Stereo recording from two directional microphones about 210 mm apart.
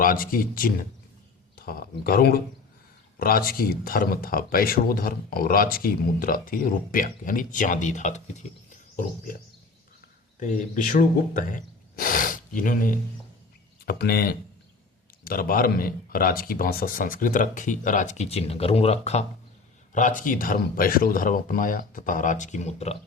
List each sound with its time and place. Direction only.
0.0 s speech: 40° left (ahead or behind)
10.4 s speech: 40° left (ahead or behind)